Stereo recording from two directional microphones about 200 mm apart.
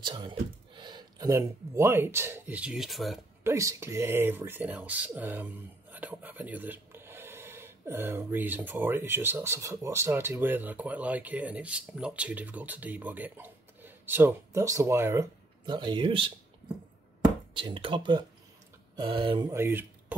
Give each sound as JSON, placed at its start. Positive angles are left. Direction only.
{"t": 0.0, "sound": "speech", "side_deg": -25}
{"t": 3.4, "sound": "speech", "side_deg": -15}
{"t": 17.6, "sound": "speech", "side_deg": -25}
{"t": 19.5, "sound": "speech", "side_deg": -10}